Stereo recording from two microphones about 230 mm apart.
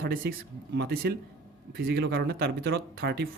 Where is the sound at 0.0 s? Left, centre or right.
Right.